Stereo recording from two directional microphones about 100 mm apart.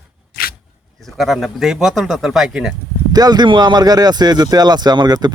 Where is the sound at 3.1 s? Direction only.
40° right (ahead or behind).